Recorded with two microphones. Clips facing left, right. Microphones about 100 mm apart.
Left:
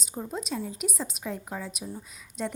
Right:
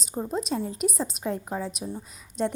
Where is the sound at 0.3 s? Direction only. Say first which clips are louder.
Right 4 dB; 40° right (ahead or behind).